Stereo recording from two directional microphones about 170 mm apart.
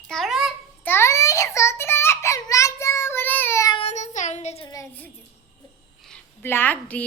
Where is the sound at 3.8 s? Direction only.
40° left (ahead or behind).